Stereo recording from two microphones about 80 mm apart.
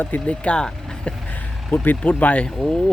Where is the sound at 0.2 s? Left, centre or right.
Centre.